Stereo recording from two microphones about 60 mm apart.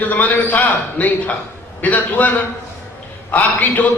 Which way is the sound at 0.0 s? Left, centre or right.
Left.